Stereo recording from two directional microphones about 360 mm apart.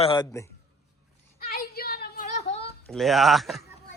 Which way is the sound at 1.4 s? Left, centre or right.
Left.